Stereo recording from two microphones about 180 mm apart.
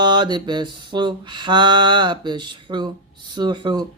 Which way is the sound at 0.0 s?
25° right (ahead or behind).